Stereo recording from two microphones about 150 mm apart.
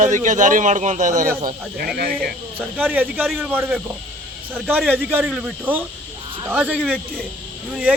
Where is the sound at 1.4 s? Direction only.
65° right (ahead or behind).